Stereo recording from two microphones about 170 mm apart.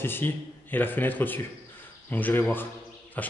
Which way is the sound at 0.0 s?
10° left (ahead or behind).